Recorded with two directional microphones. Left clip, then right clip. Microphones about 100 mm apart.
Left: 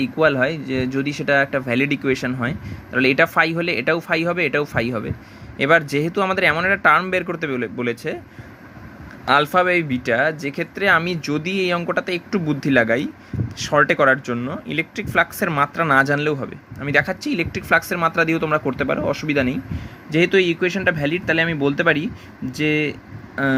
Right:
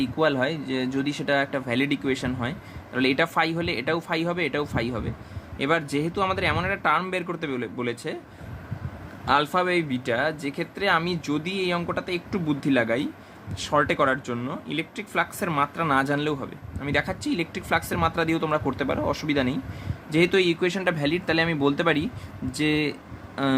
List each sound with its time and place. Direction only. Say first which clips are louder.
0.0 s speech: left 6 dB; 40° left (ahead or behind)
9.2 s speech: left 6 dB; 50° left (ahead or behind)
14.7 s speech: left 8 dB; 50° left (ahead or behind); by 23.6 s 30° left (ahead or behind)